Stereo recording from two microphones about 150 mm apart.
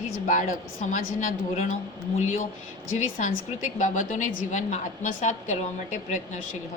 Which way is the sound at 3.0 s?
55° left (ahead or behind).